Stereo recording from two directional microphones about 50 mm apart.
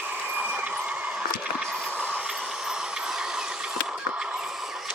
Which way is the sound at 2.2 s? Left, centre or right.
Centre.